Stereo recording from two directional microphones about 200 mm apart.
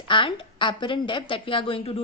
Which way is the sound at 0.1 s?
25° left (ahead or behind).